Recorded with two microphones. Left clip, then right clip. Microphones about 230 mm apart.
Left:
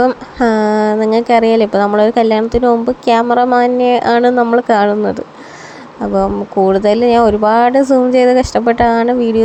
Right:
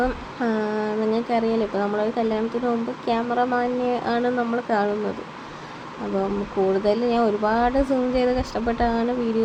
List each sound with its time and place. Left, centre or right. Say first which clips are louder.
0.0 s speech: left 12 dB; left
6.7 s speech: left 12 dB; left